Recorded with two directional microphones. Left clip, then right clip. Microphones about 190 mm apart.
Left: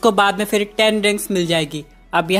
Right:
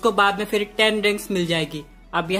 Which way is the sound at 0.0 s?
35° left (ahead or behind).